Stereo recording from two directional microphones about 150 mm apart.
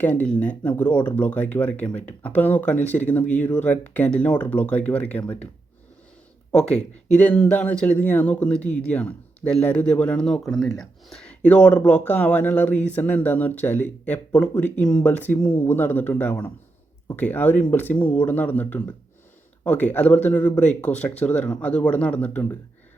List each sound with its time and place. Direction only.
0.0 s speech: 10° left (ahead or behind)
6.5 s speech: 5° left (ahead or behind)